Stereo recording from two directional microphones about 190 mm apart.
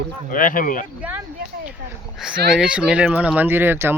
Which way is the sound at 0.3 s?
45° left (ahead or behind).